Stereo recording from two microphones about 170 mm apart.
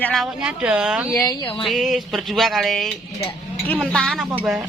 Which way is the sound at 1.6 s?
Centre (ahead or behind).